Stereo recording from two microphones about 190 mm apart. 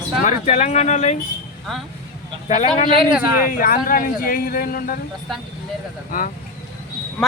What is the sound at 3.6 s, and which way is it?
A man's voice, 45° left (ahead or behind).